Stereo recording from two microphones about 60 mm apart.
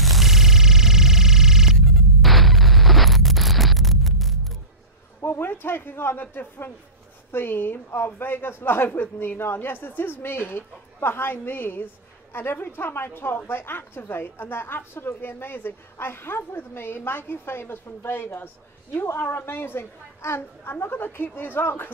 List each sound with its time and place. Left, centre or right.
0.0 s a sound: centre
1.8 s hum: centre
5.2 s speech: left
7.3 s a woman's voice: left